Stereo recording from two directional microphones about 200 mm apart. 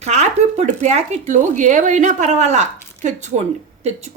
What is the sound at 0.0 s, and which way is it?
A woman's voice, 35° right (ahead or behind).